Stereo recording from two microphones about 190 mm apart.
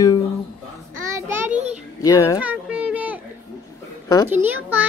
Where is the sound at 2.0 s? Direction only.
20° left (ahead or behind).